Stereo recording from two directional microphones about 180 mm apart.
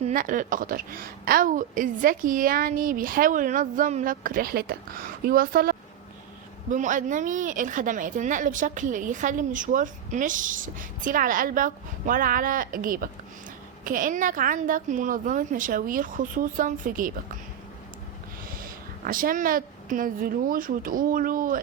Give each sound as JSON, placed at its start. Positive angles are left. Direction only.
{"t": 0.0, "sound": "a woman's voice", "side_deg": -50}
{"t": 18.6, "sound": "a woman's voice", "side_deg": -50}